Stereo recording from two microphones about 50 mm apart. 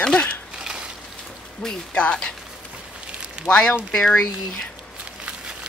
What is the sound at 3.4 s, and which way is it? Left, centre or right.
Speech, centre.